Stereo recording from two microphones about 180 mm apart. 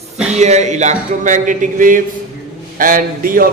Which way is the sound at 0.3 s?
40° right (ahead or behind).